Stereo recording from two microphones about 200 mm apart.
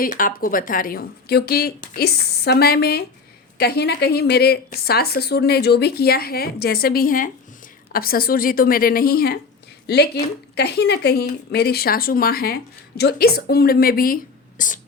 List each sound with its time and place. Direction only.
0.0 s a woman's voice: 45° left (ahead or behind)